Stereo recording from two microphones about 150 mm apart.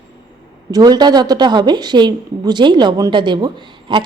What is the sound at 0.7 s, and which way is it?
Speech, 25° right (ahead or behind).